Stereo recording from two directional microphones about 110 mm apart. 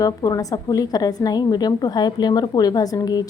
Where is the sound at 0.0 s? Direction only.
30° left (ahead or behind).